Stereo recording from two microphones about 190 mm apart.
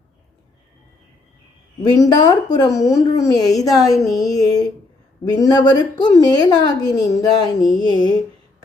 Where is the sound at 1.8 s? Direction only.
20° left (ahead or behind).